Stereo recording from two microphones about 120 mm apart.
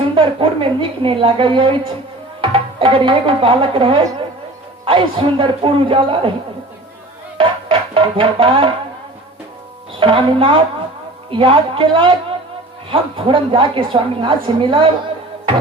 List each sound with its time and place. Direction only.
0.0 s a woman's voice: 45° right (ahead or behind)
7.3 s music: 50° right (ahead or behind)
10.0 s a woman's voice: 45° right (ahead or behind)